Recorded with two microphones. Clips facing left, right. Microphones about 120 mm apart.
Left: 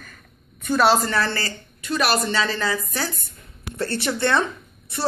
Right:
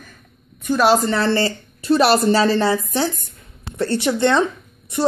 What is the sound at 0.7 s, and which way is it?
Speech, 15° right (ahead or behind).